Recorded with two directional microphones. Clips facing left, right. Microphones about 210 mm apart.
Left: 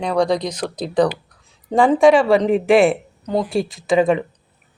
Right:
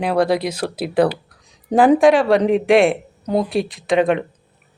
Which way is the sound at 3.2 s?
10° right (ahead or behind).